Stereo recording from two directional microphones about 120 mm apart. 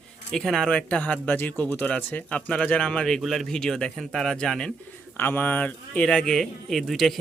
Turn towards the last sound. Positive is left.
turn(degrees=0)  # may be behind; listen again after turning